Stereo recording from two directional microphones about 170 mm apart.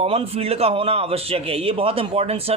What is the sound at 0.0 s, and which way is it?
Speech, 35° right (ahead or behind).